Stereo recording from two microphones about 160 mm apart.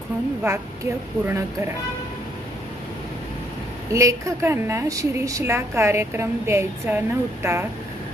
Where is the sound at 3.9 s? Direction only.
20° right (ahead or behind).